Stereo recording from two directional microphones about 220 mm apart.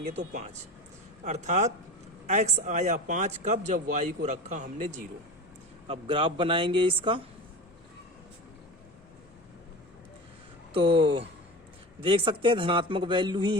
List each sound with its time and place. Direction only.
1.2 s speech: 30° right (ahead or behind)
5.9 s a man's voice: 25° right (ahead or behind)
10.8 s a man's voice: 25° right (ahead or behind)